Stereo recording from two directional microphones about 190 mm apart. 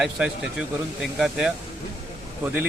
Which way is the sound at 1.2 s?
5° right (ahead or behind).